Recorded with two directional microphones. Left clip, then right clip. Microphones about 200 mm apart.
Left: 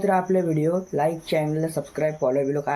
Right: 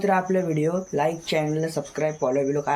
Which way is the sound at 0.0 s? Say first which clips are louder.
Left 1 dB; 10° left (ahead or behind).